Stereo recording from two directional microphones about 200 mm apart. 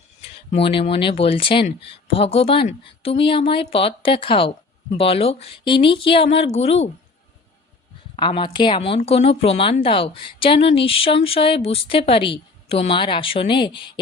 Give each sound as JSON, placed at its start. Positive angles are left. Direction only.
{"t": 0.2, "sound": "a woman's voice", "side_deg": 30}
{"t": 8.1, "sound": "a woman's voice", "side_deg": 25}